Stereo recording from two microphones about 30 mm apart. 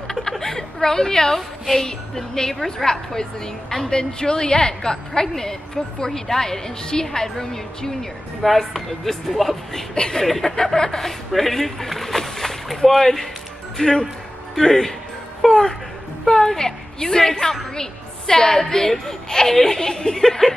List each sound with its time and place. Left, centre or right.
0.1 s a sound: centre
1.8 s a woman's voice: left
8.4 s speech: centre
9.9 s a woman's voice: left
10.2 s speech: centre
10.5 s a woman's voice: left
11.1 s speech: centre
13.7 s a woman's voice: left